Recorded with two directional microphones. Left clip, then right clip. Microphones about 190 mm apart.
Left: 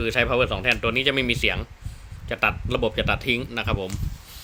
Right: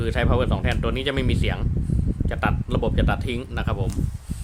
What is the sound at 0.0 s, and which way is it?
Speech, centre (ahead or behind).